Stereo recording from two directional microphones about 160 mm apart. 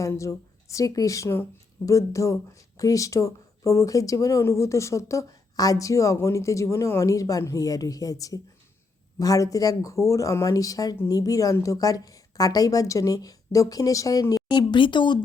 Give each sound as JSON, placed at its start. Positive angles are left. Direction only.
{"t": 0.0, "sound": "speech", "side_deg": 20}